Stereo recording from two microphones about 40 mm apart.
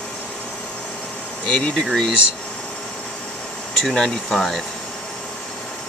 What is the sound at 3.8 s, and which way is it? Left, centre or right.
Speech, centre.